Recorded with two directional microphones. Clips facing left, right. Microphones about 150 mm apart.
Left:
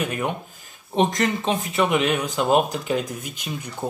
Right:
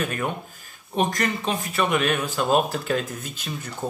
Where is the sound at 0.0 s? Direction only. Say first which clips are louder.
Left 1 dB; 20° left (ahead or behind).